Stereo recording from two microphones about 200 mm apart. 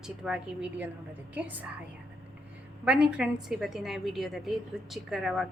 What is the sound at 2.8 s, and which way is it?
A woman's voice, 5° right (ahead or behind).